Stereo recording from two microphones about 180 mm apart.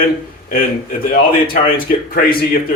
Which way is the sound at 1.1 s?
55° left (ahead or behind).